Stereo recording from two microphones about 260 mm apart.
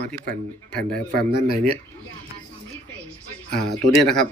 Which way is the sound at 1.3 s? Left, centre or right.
Left.